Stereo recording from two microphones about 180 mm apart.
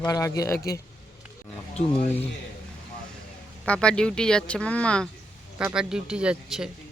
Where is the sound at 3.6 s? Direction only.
5° left (ahead or behind).